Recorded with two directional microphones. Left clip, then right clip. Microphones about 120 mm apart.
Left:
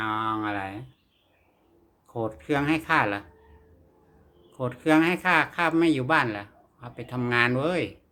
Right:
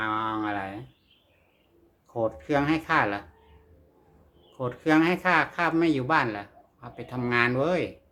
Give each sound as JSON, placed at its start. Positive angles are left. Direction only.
{"t": 0.0, "sound": "a sound", "side_deg": 25}
{"t": 2.1, "sound": "speech", "side_deg": 30}
{"t": 4.5, "sound": "speech", "side_deg": 30}